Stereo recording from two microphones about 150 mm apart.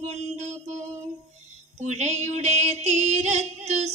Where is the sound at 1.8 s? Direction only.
50° right (ahead or behind).